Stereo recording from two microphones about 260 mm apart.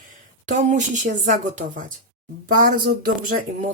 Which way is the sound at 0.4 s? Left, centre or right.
Right.